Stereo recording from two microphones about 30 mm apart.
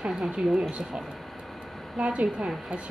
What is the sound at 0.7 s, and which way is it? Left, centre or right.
Speech, right.